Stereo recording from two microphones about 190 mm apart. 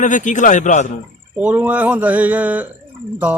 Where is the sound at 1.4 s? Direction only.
5° right (ahead or behind).